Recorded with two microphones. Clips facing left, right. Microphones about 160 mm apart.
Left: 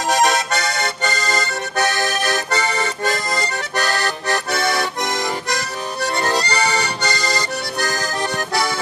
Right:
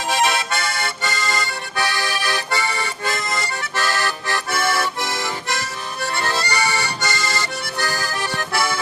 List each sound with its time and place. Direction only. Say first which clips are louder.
0.1 s accordion: left 3 dB; 40° left (ahead or behind)
4.7 s accordion: left 2 dB; 20° left (ahead or behind)
5.5 s music: left 3 dB; 40° left (ahead or behind)
7.0 s accordion: left 2 dB; 40° left (ahead or behind)
8.5 s accordion: even; 15° left (ahead or behind)